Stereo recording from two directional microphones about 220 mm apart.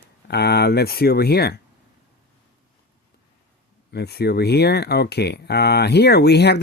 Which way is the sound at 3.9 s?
45° left (ahead or behind).